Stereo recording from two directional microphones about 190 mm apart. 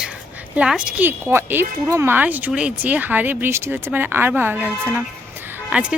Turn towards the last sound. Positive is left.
turn(degrees=-5)  # may be behind; listen again after turning